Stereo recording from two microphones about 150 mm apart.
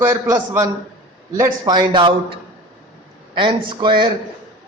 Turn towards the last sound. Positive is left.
turn(degrees=-30)  # may be behind; listen again after turning